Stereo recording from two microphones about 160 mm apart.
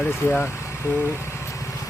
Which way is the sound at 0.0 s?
15° left (ahead or behind).